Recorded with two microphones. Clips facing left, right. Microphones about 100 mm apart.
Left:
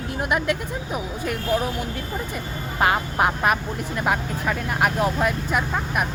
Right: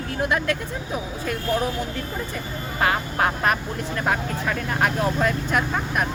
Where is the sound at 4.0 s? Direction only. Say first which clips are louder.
Left 1 dB; 10° left (ahead or behind).